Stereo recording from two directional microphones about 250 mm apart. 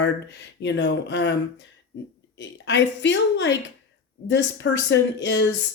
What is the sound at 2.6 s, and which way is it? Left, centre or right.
A woman's voice, left.